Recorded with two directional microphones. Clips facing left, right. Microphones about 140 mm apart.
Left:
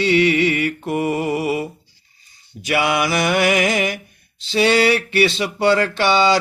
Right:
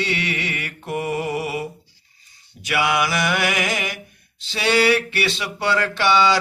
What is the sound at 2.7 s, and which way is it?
Mantra, 30° left (ahead or behind).